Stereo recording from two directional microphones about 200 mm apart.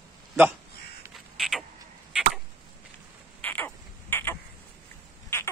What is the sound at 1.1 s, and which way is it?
Creak, centre (ahead or behind).